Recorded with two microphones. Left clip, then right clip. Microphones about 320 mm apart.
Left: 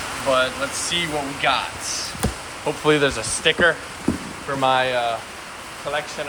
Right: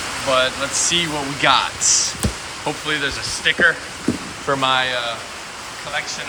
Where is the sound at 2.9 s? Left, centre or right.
Centre.